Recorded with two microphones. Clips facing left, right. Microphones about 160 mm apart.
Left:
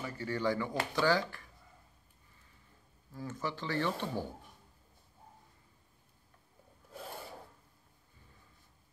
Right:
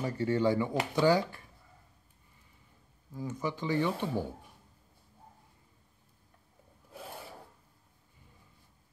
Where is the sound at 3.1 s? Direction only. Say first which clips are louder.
Right 4 dB; 15° right (ahead or behind).